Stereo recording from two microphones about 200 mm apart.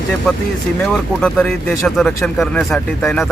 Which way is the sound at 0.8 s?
Centre (ahead or behind).